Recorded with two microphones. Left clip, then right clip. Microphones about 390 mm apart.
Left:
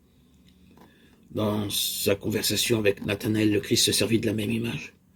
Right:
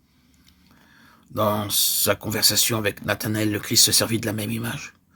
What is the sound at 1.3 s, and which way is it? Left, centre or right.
Speech, right.